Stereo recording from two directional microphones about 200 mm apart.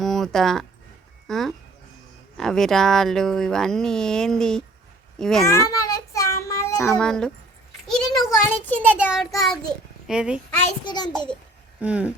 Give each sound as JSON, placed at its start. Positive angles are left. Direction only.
{"t": 0.0, "sound": "speech", "side_deg": 0}
{"t": 5.5, "sound": "child singing", "side_deg": 15}
{"t": 7.0, "sound": "speech", "side_deg": 5}
{"t": 7.9, "sound": "a sound", "side_deg": 0}
{"t": 9.0, "sound": "speech", "side_deg": -5}
{"t": 10.8, "sound": "a child's voice", "side_deg": 20}
{"t": 11.8, "sound": "speech", "side_deg": -5}